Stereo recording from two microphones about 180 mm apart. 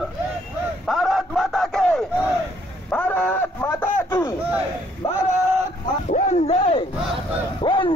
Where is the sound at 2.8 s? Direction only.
10° left (ahead or behind).